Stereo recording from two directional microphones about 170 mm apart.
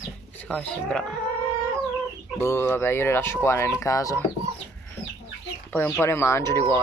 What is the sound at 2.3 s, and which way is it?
Speech, 15° left (ahead or behind).